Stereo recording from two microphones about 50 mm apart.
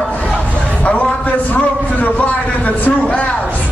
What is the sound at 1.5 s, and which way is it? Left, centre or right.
A man's voice, left.